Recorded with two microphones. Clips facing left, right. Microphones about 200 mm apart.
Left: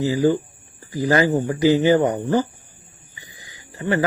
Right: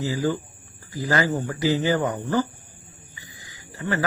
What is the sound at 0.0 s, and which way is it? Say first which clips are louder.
Speech: left 6 dB; 15° left (ahead or behind).